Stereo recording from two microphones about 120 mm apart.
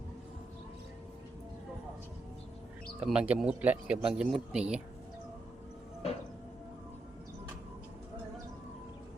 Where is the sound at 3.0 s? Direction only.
10° right (ahead or behind).